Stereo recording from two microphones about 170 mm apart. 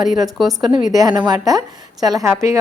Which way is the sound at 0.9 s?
20° right (ahead or behind).